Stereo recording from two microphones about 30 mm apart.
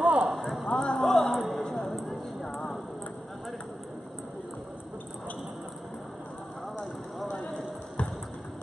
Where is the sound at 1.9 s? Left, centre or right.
Centre.